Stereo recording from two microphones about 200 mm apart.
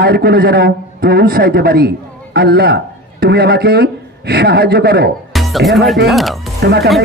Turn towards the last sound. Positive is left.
turn(degrees=-55)  # may be behind; listen again after turning